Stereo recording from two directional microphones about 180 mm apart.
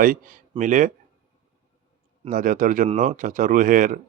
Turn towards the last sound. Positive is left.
turn(degrees=-50)  # may be behind; listen again after turning